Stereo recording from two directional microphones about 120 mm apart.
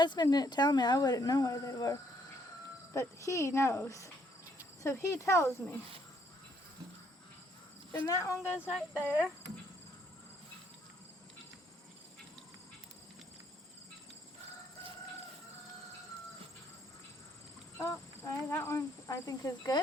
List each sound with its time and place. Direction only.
0.0 s speech: 35° left (ahead or behind)
7.9 s speech: 25° left (ahead or behind)
8.7 s speech: 5° right (ahead or behind)
17.7 s speech: 20° left (ahead or behind)